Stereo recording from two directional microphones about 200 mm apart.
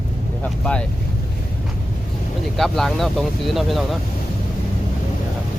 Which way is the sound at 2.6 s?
Centre (ahead or behind).